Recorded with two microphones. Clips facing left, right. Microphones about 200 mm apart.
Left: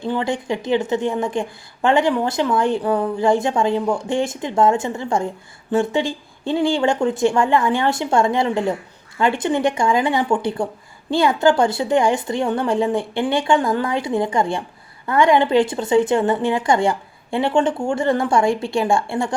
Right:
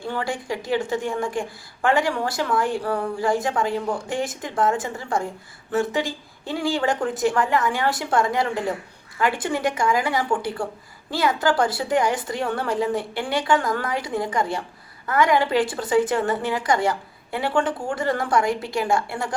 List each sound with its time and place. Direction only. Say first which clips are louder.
0.0 s a woman's voice: left 5 dB; 25° left (ahead or behind)